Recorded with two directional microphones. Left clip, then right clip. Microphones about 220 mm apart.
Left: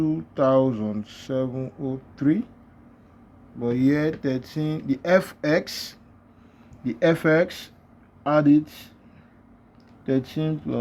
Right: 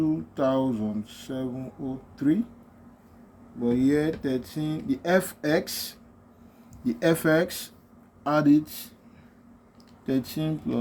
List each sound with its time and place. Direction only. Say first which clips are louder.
0.0 s speech: left 3 dB; 30° left (ahead or behind)
3.6 s speech: left 2 dB; 35° left (ahead or behind); by 8.9 s 20° left (ahead or behind)
10.1 s speech: left 3 dB; 25° left (ahead or behind)